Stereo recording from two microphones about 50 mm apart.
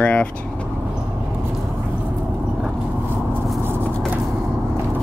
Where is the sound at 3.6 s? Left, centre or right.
Right.